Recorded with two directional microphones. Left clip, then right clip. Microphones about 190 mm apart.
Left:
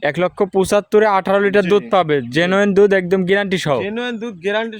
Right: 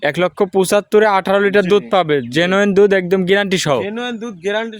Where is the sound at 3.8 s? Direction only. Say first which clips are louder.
Even; 5° right (ahead or behind).